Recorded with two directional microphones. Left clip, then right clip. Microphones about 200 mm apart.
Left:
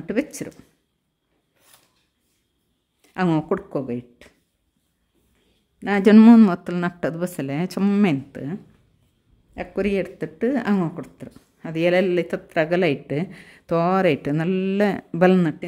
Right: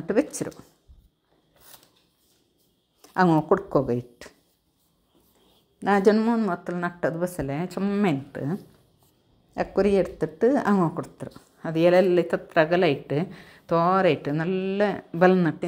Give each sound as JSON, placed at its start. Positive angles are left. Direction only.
{"t": 0.0, "sound": "speech", "side_deg": 5}
{"t": 3.0, "sound": "a sound", "side_deg": 0}
{"t": 3.3, "sound": "speech", "side_deg": 15}
{"t": 3.7, "sound": "speech", "side_deg": -10}
{"t": 5.8, "sound": "a man's voice", "side_deg": 5}
{"t": 6.1, "sound": "speech", "side_deg": 55}
{"t": 6.5, "sound": "speech", "side_deg": 30}
{"t": 8.0, "sound": "speech", "side_deg": 20}
{"t": 9.8, "sound": "speech", "side_deg": 5}
{"t": 12.6, "sound": "speech", "side_deg": 25}